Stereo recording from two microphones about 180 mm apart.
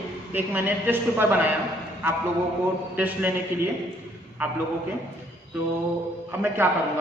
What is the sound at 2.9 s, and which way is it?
Speech, 10° right (ahead or behind).